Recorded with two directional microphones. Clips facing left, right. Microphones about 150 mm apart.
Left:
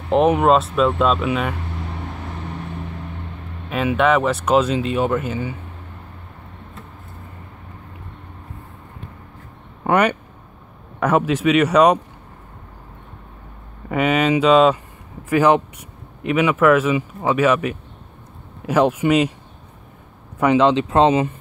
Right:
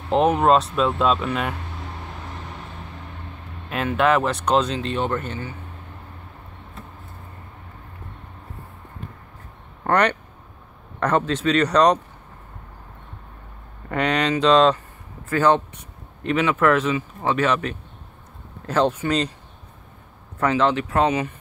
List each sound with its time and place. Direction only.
0.1 s speech: 5° left (ahead or behind)
3.6 s speech: centre (ahead or behind)
9.8 s speech: 5° left (ahead or behind)
13.8 s speech: 5° left (ahead or behind)
20.3 s speech: 15° left (ahead or behind)